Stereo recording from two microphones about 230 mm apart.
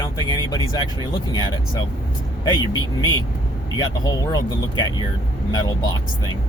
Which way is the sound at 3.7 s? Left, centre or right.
Centre.